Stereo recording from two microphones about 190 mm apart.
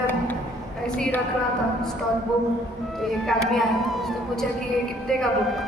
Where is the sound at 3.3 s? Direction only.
Centre (ahead or behind).